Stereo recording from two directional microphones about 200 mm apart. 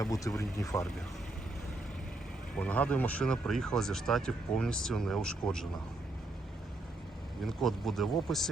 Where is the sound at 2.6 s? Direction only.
5° left (ahead or behind).